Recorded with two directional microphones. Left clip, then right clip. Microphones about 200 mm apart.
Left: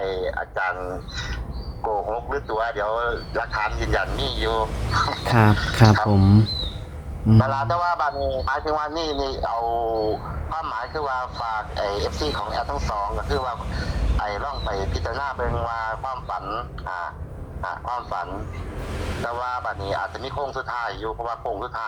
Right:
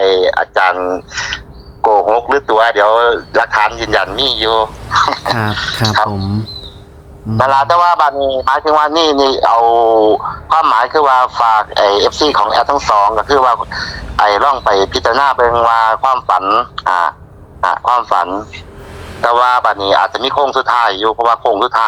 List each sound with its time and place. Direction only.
0.0 s a man's voice: 40° right (ahead or behind)
7.3 s a man's voice: 35° right (ahead or behind)